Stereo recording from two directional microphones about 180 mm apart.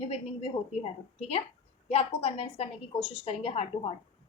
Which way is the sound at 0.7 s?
35° left (ahead or behind).